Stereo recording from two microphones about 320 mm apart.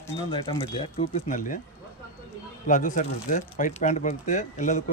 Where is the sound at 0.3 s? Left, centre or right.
Centre.